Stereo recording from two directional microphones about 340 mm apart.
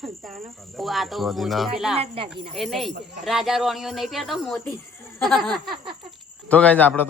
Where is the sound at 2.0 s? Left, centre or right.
Centre.